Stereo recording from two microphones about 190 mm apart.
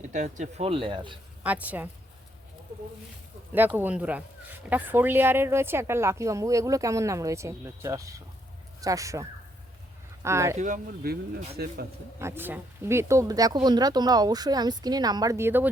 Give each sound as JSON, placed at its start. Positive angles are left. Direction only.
{"t": 0.1, "sound": "speech", "side_deg": -40}
{"t": 1.5, "sound": "speech", "side_deg": -10}
{"t": 3.8, "sound": "speech", "side_deg": -5}
{"t": 10.2, "sound": "speech", "side_deg": -15}
{"t": 10.6, "sound": "speech", "side_deg": -45}
{"t": 12.2, "sound": "speech", "side_deg": -10}